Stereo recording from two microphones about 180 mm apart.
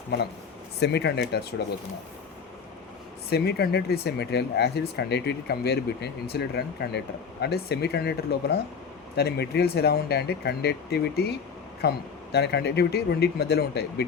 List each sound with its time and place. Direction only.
0.8 s speech: 70° left (ahead or behind)
3.2 s speech: 65° left (ahead or behind)